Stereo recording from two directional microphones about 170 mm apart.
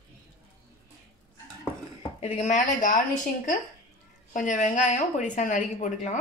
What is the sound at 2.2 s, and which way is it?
A woman's voice, 40° left (ahead or behind).